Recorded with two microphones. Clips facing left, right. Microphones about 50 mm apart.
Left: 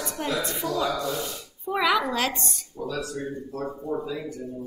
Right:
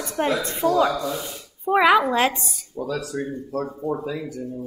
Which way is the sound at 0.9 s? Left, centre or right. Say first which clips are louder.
Right 2 dB; centre.